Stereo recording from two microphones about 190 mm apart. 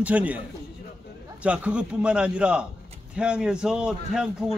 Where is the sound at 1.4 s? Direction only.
5° right (ahead or behind).